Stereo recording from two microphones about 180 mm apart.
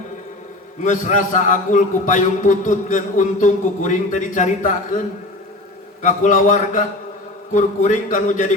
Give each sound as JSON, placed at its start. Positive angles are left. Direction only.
{"t": 0.8, "sound": "a man's voice", "side_deg": 45}